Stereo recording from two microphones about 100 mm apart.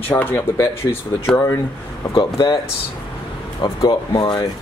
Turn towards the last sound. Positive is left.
turn(degrees=45)  # may be behind; listen again after turning